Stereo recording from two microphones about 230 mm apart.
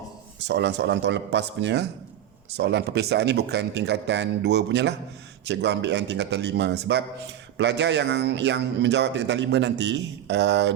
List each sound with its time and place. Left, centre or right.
0.4 s speech: right